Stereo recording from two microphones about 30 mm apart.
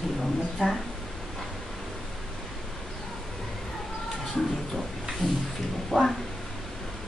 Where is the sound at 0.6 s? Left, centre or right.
Left.